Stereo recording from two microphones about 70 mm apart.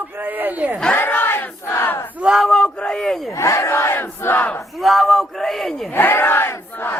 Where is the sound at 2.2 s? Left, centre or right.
Centre.